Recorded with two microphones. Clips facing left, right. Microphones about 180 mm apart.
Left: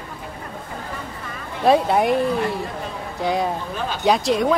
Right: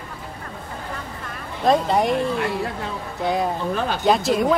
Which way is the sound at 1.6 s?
5° left (ahead or behind).